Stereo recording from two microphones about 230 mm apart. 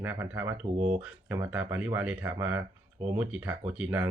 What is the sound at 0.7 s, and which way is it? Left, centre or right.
Speech, right.